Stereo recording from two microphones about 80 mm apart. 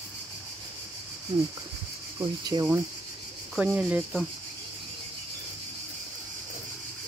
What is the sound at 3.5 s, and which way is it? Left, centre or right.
Speech, centre.